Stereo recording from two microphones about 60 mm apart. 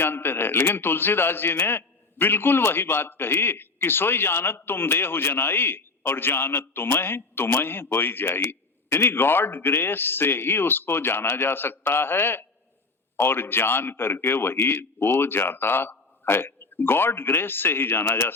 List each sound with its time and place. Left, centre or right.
0.0 s a man's voice: left